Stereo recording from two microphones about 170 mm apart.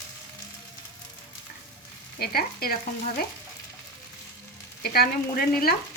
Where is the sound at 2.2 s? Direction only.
65° left (ahead or behind).